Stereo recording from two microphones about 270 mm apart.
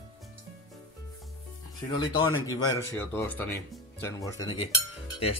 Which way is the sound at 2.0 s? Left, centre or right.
Centre.